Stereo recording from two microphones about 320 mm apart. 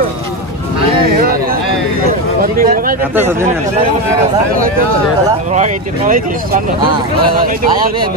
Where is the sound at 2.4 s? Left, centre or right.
Right.